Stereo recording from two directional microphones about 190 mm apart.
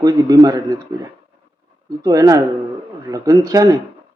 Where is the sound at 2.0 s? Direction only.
20° right (ahead or behind).